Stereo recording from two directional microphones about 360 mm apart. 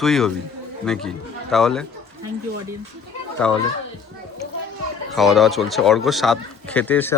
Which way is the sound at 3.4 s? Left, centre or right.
Centre.